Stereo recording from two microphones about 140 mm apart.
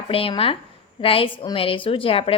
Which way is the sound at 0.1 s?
40° left (ahead or behind).